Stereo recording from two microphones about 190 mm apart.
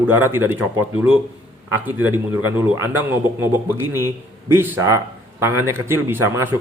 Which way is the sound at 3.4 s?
10° right (ahead or behind).